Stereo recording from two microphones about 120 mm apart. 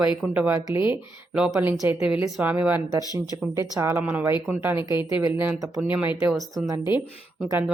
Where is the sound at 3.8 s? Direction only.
10° right (ahead or behind).